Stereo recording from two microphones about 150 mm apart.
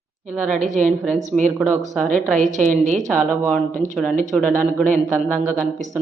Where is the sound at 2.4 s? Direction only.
55° right (ahead or behind).